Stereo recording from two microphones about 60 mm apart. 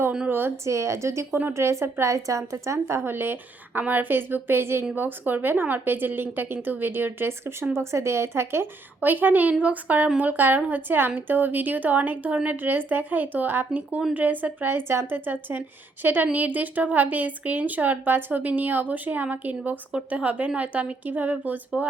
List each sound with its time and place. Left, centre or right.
0.3 s a woman's voice: right
0.6 s speech: right
1.3 s a woman's voice: right
1.6 s a woman's voice: right
7.8 s speech: right
9.0 s a woman's voice: right